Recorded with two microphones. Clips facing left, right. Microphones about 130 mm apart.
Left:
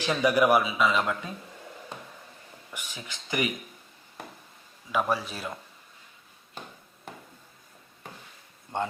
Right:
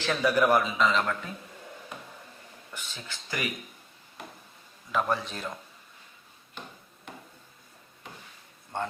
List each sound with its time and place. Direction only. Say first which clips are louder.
0.0 s a man's voice: left 2 dB; 15° left (ahead or behind)
2.7 s a man's voice: left 1 dB; 15° left (ahead or behind)
4.9 s a man's voice: left 1 dB; 10° left (ahead or behind)
8.7 s a man's voice: left 3 dB; 15° left (ahead or behind)